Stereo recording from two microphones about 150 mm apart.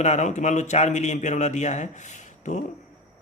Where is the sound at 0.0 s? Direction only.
50° left (ahead or behind).